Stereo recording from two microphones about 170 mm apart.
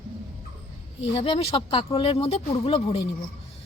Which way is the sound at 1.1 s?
35° left (ahead or behind).